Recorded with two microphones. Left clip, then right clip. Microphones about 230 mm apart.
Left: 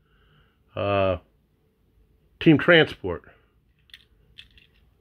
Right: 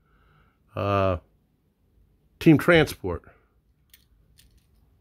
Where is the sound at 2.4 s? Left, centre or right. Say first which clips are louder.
Left 1 dB; centre.